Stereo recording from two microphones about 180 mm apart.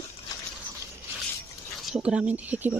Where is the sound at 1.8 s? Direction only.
5° right (ahead or behind).